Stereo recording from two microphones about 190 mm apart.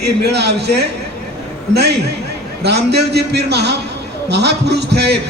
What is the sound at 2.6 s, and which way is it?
A man's voice, 60° right (ahead or behind).